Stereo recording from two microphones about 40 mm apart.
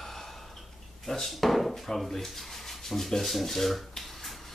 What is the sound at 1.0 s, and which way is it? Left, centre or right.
Rub, centre.